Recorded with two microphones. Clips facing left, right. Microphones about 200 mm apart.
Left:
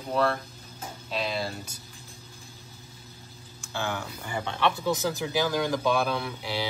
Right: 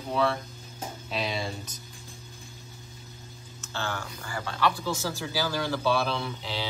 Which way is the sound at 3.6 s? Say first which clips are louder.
Left 2 dB; 15° left (ahead or behind).